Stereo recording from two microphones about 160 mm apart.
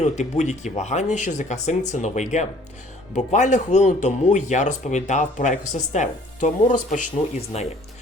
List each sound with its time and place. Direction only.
0.0 s speech: 45° left (ahead or behind)
7.5 s speech: 40° left (ahead or behind)